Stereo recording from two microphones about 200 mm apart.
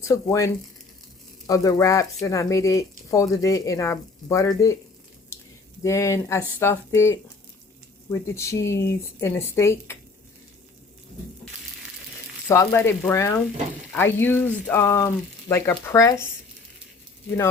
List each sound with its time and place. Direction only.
0.1 s speech: 15° left (ahead or behind)
5.8 s speech: 15° left (ahead or behind)
8.4 s speech: 15° left (ahead or behind)
12.5 s speech: 10° left (ahead or behind)